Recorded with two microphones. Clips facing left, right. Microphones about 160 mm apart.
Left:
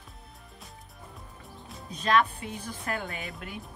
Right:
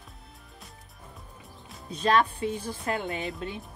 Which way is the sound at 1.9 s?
35° right (ahead or behind).